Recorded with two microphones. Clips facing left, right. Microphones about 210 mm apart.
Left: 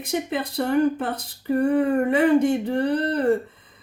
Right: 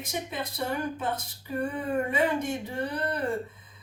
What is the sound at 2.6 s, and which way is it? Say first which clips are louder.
Speech: left 9 dB; 60° left (ahead or behind).